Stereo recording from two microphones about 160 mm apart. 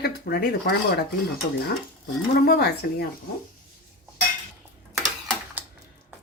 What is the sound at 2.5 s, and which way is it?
Speech, 80° left.